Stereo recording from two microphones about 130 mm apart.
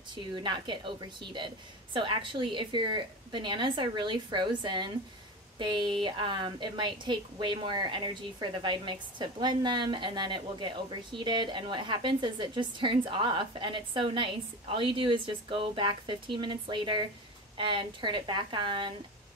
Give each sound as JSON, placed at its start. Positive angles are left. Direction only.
{"t": 0.1, "sound": "a woman's voice", "side_deg": -35}